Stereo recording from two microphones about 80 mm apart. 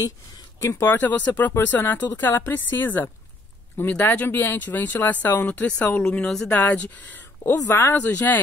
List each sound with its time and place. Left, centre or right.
0.6 s speech: left
0.8 s speech: left
6.2 s speech: centre
6.5 s speech: left
7.5 s speech: left